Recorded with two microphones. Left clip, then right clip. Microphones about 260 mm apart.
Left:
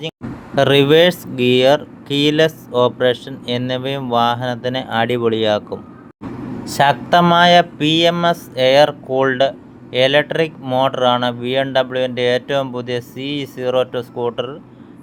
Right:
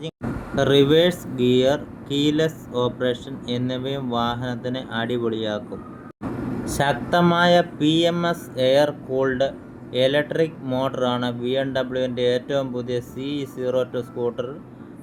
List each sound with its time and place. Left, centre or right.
0.5 s speech: left
6.7 s speech: left